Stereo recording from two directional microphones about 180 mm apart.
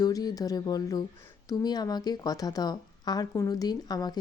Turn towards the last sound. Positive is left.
turn(degrees=20)  # may be behind; listen again after turning